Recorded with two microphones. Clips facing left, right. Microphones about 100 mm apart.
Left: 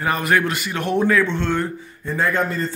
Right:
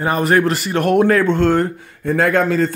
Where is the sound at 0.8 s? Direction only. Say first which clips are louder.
Right 5 dB; 55° right (ahead or behind).